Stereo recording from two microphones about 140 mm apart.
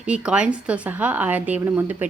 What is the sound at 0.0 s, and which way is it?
Speech, 10° right (ahead or behind).